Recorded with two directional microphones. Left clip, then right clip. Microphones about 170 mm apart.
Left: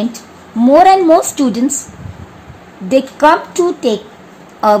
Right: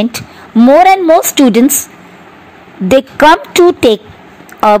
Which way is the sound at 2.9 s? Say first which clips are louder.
Right 4 dB; 50° right (ahead or behind).